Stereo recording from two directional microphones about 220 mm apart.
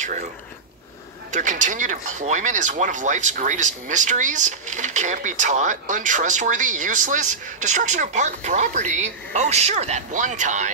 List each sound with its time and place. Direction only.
1.3 s speech: 35° right (ahead or behind)